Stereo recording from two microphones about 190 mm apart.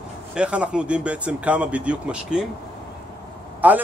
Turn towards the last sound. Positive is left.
turn(degrees=-10)  # may be behind; listen again after turning